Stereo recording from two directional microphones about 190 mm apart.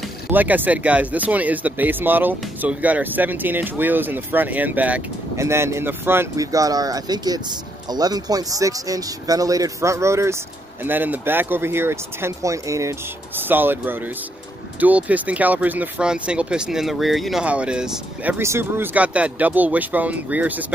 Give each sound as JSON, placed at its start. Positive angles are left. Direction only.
{"t": 0.3, "sound": "speech", "side_deg": -10}